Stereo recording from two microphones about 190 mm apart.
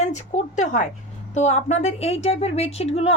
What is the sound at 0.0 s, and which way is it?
A woman's voice, 40° left (ahead or behind).